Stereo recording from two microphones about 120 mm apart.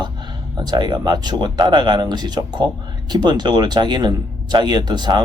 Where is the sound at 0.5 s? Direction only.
35° right (ahead or behind).